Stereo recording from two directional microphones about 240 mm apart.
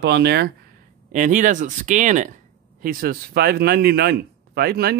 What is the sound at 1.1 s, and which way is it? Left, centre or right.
A man's voice, right.